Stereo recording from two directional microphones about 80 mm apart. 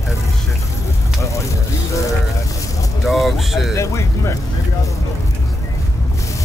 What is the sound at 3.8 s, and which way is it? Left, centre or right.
Music, left.